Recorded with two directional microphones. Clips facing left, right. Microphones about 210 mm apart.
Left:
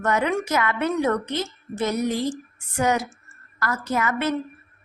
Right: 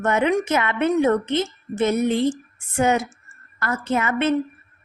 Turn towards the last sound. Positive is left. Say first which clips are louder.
# right 3 dB
turn(degrees=-25)  # may be behind; listen again after turning